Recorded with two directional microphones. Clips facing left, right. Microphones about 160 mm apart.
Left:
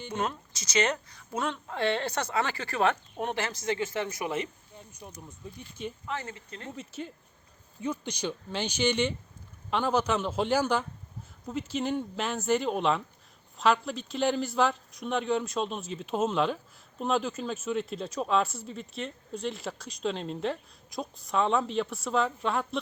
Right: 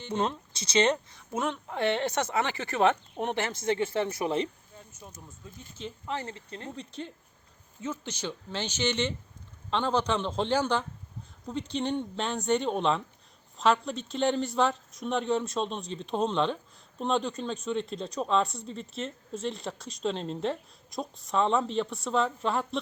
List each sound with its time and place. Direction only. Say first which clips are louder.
0.1 s a woman's voice: right 3 dB; 30° right (ahead or behind)
4.9 s speech: left 4 dB; 15° left (ahead or behind)
6.1 s speech: right 1 dB; 30° right (ahead or behind)
6.7 s speech: even; 5° left (ahead or behind)